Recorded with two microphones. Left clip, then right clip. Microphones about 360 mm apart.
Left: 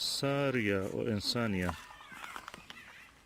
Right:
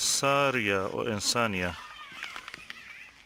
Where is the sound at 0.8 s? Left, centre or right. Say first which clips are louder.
Right 5 dB; right.